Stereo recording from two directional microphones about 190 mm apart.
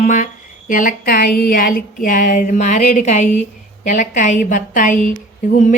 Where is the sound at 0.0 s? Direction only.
40° left (ahead or behind).